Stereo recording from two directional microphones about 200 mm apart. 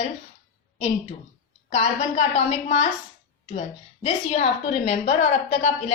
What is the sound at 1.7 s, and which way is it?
A woman's voice, 30° left (ahead or behind).